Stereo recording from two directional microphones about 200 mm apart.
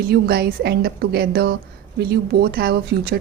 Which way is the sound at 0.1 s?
50° right (ahead or behind).